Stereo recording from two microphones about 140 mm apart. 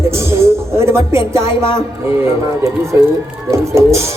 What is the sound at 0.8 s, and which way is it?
Speech, 20° right (ahead or behind).